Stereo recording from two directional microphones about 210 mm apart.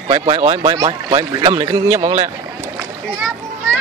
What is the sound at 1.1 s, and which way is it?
Speech, 15° right (ahead or behind).